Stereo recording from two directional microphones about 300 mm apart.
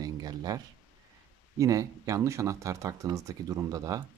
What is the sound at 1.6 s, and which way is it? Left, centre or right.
Speech, centre.